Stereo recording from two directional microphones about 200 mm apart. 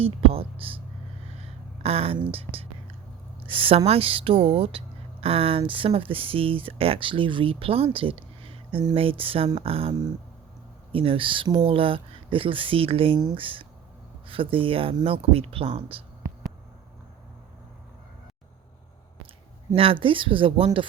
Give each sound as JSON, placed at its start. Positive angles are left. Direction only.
{"t": 0.0, "sound": "speech", "side_deg": -30}
{"t": 1.4, "sound": "a sound", "side_deg": -30}
{"t": 2.3, "sound": "whispering", "side_deg": -30}
{"t": 3.4, "sound": "speech", "side_deg": -25}
{"t": 19.7, "sound": "speech", "side_deg": -25}